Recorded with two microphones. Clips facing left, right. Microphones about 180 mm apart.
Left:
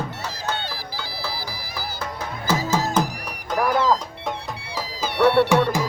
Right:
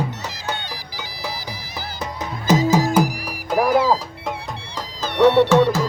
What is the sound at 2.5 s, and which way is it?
Music, 15° right (ahead or behind).